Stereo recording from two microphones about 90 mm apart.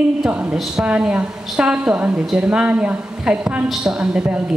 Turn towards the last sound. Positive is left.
turn(degrees=-10)  # may be behind; listen again after turning